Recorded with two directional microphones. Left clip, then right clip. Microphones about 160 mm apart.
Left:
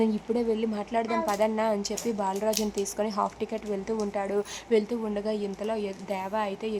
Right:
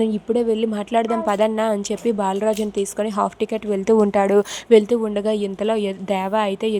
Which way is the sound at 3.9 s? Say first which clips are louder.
Right 14 dB; 55° right (ahead or behind).